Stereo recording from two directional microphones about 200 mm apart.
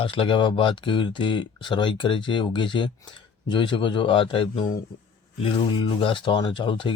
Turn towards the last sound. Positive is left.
turn(degrees=25)  # may be behind; listen again after turning